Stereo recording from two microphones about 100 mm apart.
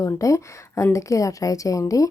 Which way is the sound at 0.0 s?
30° left (ahead or behind).